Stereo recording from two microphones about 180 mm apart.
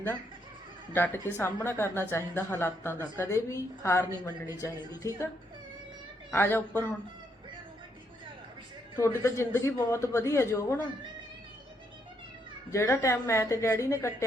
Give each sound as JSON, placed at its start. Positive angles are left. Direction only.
{"t": 0.9, "sound": "a woman's voice", "side_deg": 10}
{"t": 6.3, "sound": "a woman's voice", "side_deg": 10}
{"t": 9.0, "sound": "a woman's voice", "side_deg": 15}
{"t": 12.7, "sound": "a woman's voice", "side_deg": 15}